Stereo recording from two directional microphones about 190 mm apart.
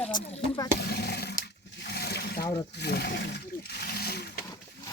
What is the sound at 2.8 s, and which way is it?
Speech, 60° left (ahead or behind).